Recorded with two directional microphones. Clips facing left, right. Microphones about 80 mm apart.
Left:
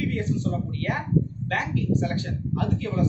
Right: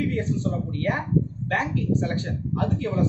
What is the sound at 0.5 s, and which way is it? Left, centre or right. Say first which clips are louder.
A man's voice: right 2 dB; right.